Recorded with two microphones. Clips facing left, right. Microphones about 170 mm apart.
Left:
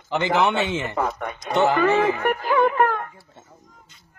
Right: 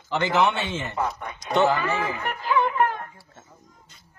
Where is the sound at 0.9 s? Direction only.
60° left (ahead or behind).